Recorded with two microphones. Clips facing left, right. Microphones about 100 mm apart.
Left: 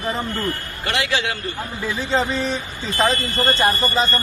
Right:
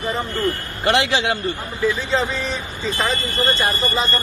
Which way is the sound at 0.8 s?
30° right (ahead or behind).